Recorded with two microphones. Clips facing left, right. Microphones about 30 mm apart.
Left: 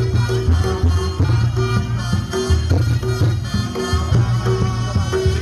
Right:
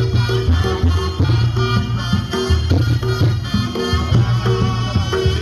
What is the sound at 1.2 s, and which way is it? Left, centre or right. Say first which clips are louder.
Music: right 2 dB; right.